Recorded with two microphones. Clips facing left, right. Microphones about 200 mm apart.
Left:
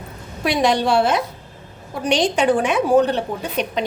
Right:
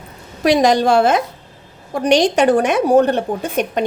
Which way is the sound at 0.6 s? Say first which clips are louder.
Right 2 dB; 45° right (ahead or behind).